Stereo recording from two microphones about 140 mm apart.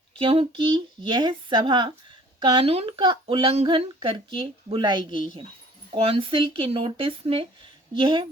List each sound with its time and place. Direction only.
0.2 s a woman's voice: 40° right (ahead or behind)